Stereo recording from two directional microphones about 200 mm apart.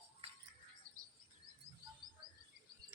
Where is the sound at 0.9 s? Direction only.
90° right.